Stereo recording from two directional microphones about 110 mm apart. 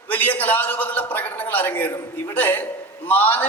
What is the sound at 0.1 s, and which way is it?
A man's voice, 15° left (ahead or behind).